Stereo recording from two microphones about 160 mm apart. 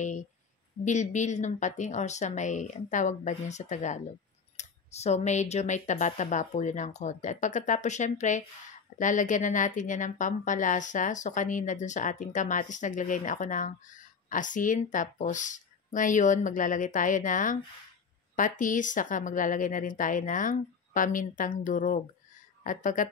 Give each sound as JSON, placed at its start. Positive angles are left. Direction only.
{"t": 0.8, "sound": "a woman's voice", "side_deg": 50}